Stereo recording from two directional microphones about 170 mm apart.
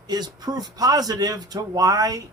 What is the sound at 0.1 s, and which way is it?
A man's voice, 25° right (ahead or behind).